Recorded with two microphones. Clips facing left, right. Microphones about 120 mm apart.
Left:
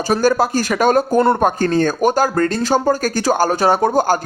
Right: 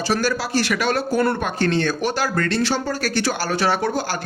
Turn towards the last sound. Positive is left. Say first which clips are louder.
# left 7 dB
turn(degrees=45)  # may be behind; listen again after turning